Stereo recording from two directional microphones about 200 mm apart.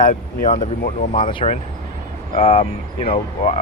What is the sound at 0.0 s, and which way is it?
Speech, 40° left (ahead or behind).